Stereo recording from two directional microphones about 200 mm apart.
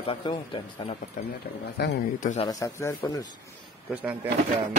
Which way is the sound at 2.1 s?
40° left (ahead or behind).